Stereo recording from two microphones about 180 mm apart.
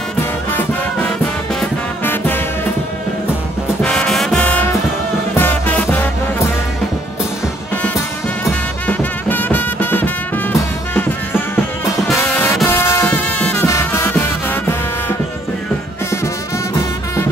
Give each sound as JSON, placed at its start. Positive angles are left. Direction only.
{"t": 0.2, "sound": "music", "side_deg": 10}
{"t": 3.8, "sound": "music", "side_deg": 5}
{"t": 8.8, "sound": "music", "side_deg": 10}
{"t": 13.2, "sound": "music", "side_deg": 5}
{"t": 13.7, "sound": "music", "side_deg": 15}